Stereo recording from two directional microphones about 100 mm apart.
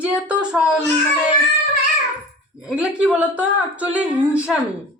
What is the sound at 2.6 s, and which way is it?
Speech, 5° right (ahead or behind).